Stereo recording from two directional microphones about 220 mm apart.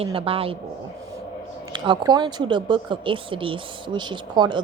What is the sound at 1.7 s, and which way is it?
Speech, 20° right (ahead or behind).